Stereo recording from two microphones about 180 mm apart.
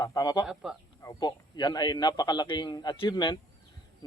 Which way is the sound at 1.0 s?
25° left (ahead or behind).